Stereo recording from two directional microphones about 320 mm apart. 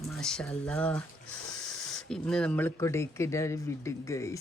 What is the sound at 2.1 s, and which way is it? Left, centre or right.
Speech, centre.